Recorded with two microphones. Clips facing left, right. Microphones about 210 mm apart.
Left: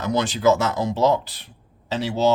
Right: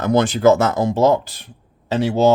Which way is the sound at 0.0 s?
50° right (ahead or behind).